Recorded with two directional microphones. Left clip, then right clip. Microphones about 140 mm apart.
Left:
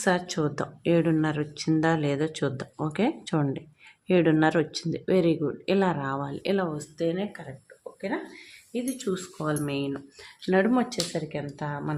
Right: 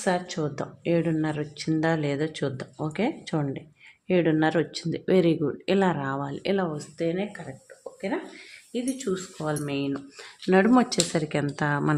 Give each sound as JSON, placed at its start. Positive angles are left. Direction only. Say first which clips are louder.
{"t": 0.0, "sound": "speech", "louder": "left 1 dB", "side_deg": 20}
{"t": 8.9, "sound": "speech", "louder": "right 2 dB", "side_deg": 5}
{"t": 9.1, "sound": "speech", "louder": "even", "side_deg": 15}
{"t": 9.6, "sound": "speech", "louder": "right 1 dB", "side_deg": -5}
{"t": 10.4, "sound": "speech", "louder": "right 2 dB", "side_deg": -25}
{"t": 10.7, "sound": "speech", "louder": "right 4 dB", "side_deg": -35}